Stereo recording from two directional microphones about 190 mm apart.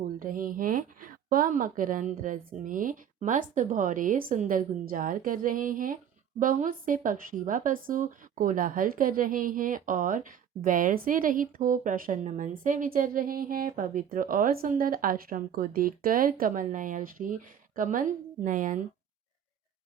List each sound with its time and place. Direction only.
0.2 s speech: 45° right (ahead or behind)